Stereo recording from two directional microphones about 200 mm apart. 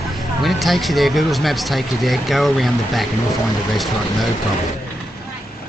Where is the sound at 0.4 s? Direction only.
Centre (ahead or behind).